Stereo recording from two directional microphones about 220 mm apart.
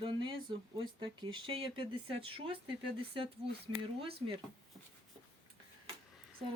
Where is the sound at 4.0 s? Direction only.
25° right (ahead or behind).